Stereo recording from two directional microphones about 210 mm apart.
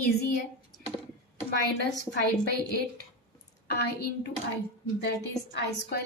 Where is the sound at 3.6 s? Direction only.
50° left (ahead or behind).